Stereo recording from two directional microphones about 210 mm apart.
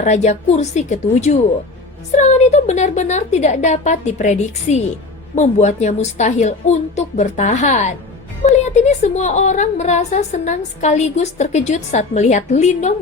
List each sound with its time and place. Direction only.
0.0 s a woman's voice: 35° left (ahead or behind)